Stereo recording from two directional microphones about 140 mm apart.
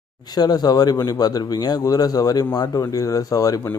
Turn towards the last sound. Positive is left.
turn(degrees=25)  # may be behind; listen again after turning